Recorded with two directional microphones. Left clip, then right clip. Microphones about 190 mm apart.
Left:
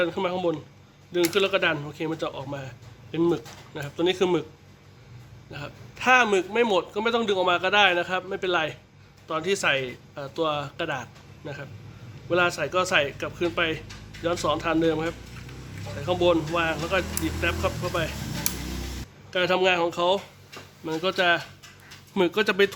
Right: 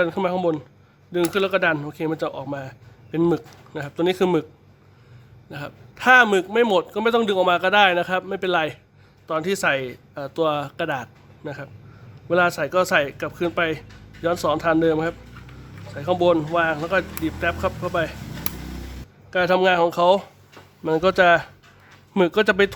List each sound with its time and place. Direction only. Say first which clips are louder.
0.0 s a man's voice: right 4 dB; 60° right (ahead or behind)
5.5 s a man's voice: right 4 dB; 60° right (ahead or behind)
19.3 s a man's voice: right 4 dB; 60° right (ahead or behind)
20.8 s speech: right 7 dB; 50° right (ahead or behind)
22.1 s speech: right 5 dB; 30° right (ahead or behind)